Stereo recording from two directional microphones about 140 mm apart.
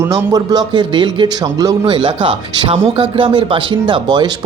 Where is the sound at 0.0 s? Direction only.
20° right (ahead or behind).